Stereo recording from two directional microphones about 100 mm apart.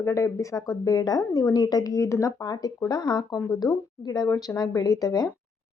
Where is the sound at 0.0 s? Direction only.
30° left (ahead or behind).